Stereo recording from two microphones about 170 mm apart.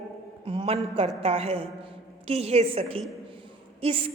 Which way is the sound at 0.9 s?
35° right (ahead or behind).